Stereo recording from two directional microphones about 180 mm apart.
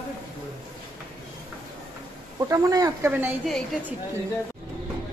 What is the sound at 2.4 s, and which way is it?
Speech, 20° right (ahead or behind).